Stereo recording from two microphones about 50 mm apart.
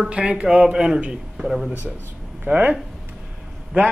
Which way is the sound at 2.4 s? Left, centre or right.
Right.